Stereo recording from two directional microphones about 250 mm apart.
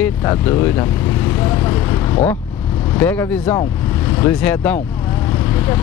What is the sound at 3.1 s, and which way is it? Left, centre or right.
Speech, centre.